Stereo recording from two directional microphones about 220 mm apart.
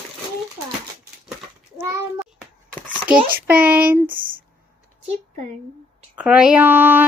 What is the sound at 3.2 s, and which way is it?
Child singing, 10° right (ahead or behind).